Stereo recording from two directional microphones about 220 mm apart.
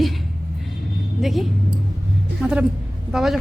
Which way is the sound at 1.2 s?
Centre (ahead or behind).